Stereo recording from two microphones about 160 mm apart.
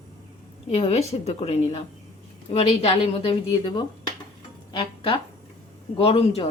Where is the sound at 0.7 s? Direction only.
40° left (ahead or behind).